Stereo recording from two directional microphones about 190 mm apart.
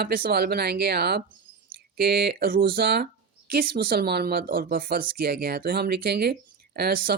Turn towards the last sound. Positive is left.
turn(degrees=-50)  # may be behind; listen again after turning